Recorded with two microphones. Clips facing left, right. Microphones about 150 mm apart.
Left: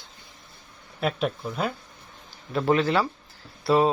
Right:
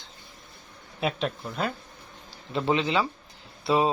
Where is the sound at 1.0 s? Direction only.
Centre (ahead or behind).